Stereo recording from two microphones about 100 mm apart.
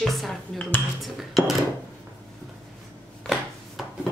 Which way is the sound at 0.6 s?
15° left (ahead or behind).